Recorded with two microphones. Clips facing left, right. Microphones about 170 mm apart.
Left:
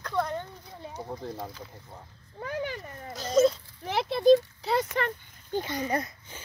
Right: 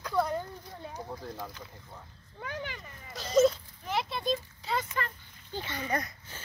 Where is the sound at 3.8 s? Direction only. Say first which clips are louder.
Left 10 dB; 70° left (ahead or behind).